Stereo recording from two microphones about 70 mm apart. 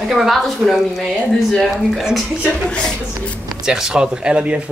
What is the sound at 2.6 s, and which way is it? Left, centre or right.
Speech, centre.